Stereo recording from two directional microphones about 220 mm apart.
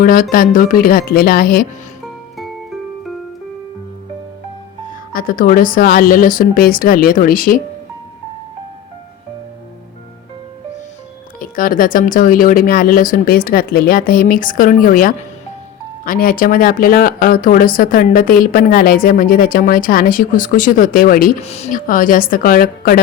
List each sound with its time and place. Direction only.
0.0 s speech: 40° left (ahead or behind)
2.4 s music: centre (ahead or behind)
4.9 s speech: 40° left (ahead or behind)
11.3 s speech: 40° left (ahead or behind)
21.4 s speech: 30° left (ahead or behind)